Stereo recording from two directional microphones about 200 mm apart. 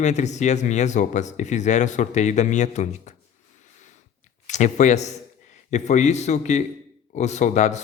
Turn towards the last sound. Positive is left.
turn(degrees=35)  # may be behind; listen again after turning